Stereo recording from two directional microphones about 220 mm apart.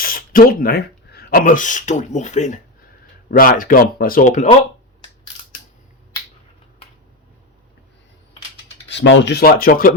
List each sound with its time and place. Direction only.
0.0 s speech: 40° left (ahead or behind)
8.9 s speech: 55° left (ahead or behind)